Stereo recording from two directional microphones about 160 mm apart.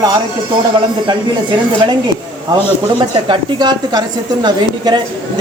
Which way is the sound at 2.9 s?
25° right (ahead or behind).